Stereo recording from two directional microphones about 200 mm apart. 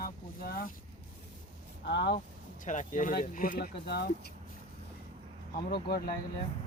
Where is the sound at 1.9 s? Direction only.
60° left (ahead or behind).